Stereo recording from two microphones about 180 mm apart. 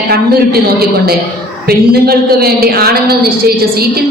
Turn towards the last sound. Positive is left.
turn(degrees=-60)  # may be behind; listen again after turning